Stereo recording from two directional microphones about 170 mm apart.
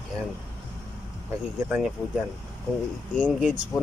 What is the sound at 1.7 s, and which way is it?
Speech, 5° right (ahead or behind).